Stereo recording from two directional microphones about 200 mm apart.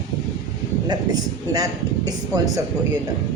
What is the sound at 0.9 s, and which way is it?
A man's voice, 20° right (ahead or behind).